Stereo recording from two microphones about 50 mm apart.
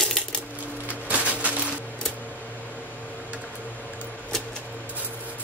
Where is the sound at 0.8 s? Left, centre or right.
Right.